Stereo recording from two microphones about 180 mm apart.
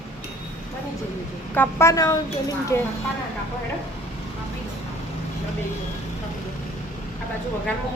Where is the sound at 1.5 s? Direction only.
10° left (ahead or behind).